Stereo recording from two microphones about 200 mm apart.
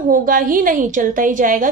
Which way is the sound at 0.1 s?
45° right (ahead or behind).